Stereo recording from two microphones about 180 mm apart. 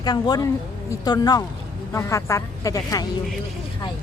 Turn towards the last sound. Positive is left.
turn(degrees=20)  # may be behind; listen again after turning